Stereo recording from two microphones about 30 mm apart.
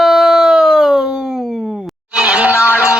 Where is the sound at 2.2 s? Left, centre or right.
Right.